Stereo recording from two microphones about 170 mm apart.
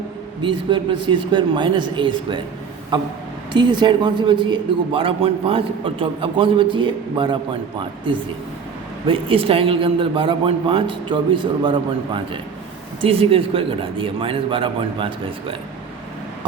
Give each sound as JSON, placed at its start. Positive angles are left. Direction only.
{"t": 0.4, "sound": "a man's voice", "side_deg": -30}
{"t": 3.5, "sound": "a man's voice", "side_deg": -25}
{"t": 9.0, "sound": "a man's voice", "side_deg": -30}